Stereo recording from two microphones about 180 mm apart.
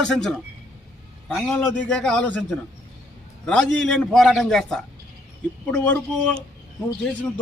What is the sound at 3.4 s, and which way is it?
A man's voice, 5° left (ahead or behind).